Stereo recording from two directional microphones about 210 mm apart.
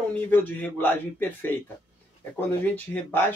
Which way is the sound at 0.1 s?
10° left (ahead or behind).